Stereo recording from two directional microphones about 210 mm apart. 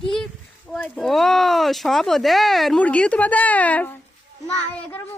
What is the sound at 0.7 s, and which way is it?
A woman's voice, 5° left (ahead or behind).